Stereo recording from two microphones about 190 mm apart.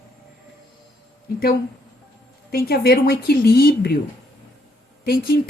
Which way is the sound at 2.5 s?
55° left (ahead or behind).